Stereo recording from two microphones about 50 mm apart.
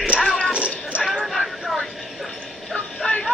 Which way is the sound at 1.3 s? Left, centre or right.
Centre.